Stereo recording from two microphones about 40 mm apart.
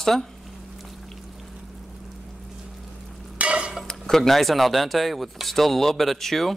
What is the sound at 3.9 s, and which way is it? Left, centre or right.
Speech, centre.